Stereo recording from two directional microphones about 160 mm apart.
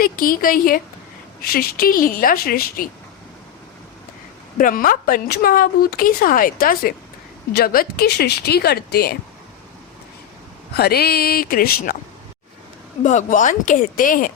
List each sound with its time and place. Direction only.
0.0 s a woman's voice: 65° left (ahead or behind)
4.5 s a woman's voice: 60° left (ahead or behind); by 9.1 s 80° left
10.8 s a woman's voice: 80° left
13.0 s speech: 50° left (ahead or behind)